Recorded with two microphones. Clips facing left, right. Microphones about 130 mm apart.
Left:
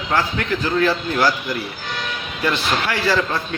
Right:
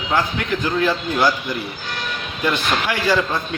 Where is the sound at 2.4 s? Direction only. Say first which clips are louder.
Even; 15° right (ahead or behind).